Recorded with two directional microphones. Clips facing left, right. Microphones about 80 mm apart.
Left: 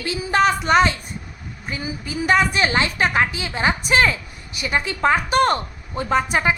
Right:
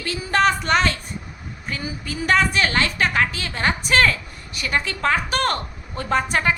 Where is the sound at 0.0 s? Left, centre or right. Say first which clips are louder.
Left 1 dB; centre.